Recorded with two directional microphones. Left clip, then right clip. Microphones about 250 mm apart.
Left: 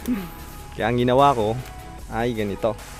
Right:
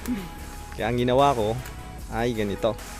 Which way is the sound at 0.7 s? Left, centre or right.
Centre.